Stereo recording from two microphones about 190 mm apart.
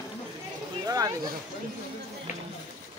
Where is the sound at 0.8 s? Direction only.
20° right (ahead or behind).